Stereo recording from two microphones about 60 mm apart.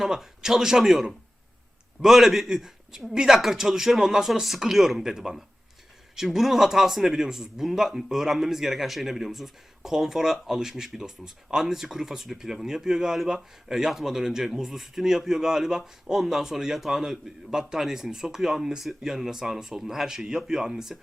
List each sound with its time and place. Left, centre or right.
0.0 s a man's voice: centre